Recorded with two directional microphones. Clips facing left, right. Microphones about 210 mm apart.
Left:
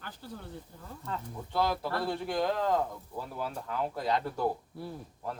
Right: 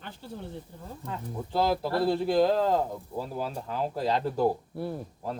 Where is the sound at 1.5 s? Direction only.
30° right (ahead or behind).